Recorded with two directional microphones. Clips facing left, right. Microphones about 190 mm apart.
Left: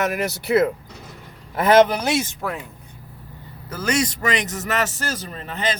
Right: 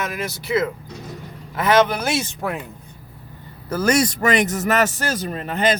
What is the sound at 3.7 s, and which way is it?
Speech, 45° right (ahead or behind).